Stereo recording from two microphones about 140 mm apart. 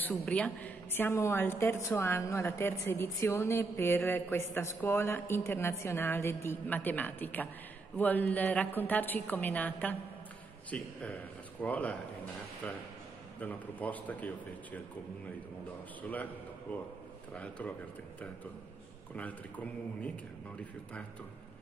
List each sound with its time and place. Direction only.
0.1 s a woman's voice: 5° left (ahead or behind)
16.0 s a woman's voice: 10° left (ahead or behind)
19.1 s a woman's voice: 10° left (ahead or behind)